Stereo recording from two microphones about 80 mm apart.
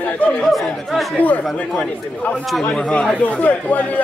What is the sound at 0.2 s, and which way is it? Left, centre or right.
Speech, centre.